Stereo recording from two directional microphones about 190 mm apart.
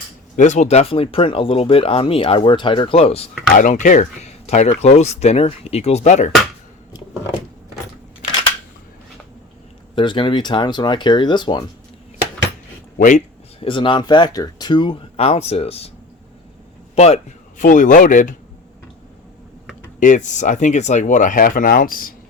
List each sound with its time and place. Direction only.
0.3 s speech: 40° left (ahead or behind)
3.5 s speech: 40° left (ahead or behind)
9.9 s speech: 25° left (ahead or behind)
13.0 s speech: 40° left (ahead or behind)
16.9 s a man's voice: 35° left (ahead or behind)
20.0 s speech: 40° left (ahead or behind)